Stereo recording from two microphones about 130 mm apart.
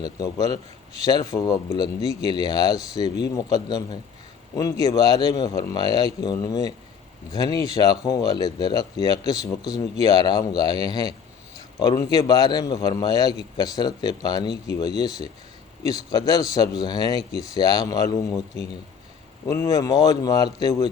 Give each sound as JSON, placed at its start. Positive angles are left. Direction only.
{"t": 0.0, "sound": "a man's voice", "side_deg": 30}
{"t": 19.5, "sound": "a man's voice", "side_deg": 25}